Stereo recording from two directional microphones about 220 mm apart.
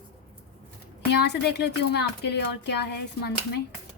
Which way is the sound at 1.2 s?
50° left (ahead or behind).